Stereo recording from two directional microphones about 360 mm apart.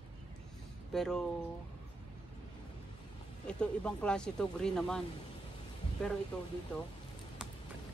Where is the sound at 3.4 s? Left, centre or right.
Centre.